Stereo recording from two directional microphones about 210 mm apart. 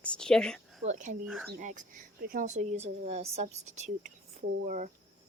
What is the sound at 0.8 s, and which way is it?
Speech, 35° right (ahead or behind).